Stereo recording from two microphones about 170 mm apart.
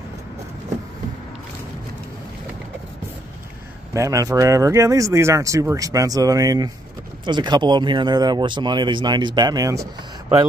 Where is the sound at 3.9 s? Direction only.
20° right (ahead or behind).